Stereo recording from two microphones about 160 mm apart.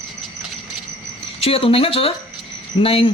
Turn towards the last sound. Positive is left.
turn(degrees=35)  # may be behind; listen again after turning